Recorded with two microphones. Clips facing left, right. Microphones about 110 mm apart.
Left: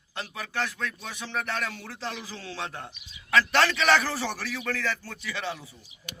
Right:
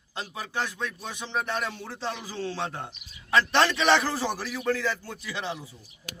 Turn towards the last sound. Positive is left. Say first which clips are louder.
# even
turn(degrees=-15)  # may be behind; listen again after turning